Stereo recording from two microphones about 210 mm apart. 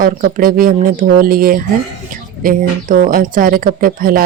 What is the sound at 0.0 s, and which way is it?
A woman's voice, 45° right (ahead or behind).